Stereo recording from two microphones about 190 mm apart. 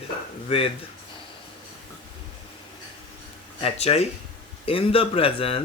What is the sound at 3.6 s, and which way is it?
Speech, 35° left (ahead or behind).